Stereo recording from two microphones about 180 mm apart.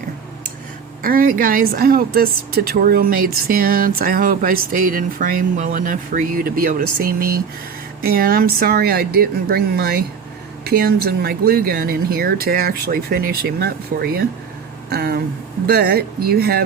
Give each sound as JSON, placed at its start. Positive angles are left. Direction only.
{"t": 1.0, "sound": "speech", "side_deg": -50}